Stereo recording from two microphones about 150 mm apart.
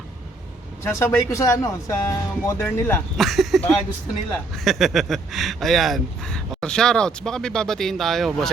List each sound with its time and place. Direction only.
0.9 s speech: 20° left (ahead or behind)
3.2 s speech: centre (ahead or behind)